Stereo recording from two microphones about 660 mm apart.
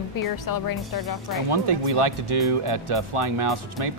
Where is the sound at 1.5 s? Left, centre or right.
Right.